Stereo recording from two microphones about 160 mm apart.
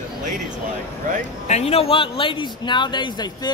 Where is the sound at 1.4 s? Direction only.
40° left (ahead or behind).